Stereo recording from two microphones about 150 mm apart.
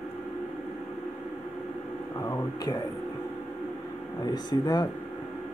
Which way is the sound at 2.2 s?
25° left (ahead or behind).